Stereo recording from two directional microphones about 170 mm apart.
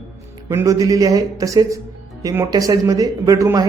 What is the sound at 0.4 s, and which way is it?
Speech, 15° right (ahead or behind).